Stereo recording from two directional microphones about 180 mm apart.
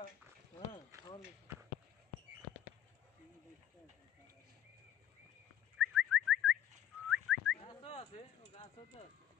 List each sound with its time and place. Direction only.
5.8 s bird: 5° right (ahead or behind)
7.1 s whistling: centre (ahead or behind)
7.6 s a sound: 35° left (ahead or behind)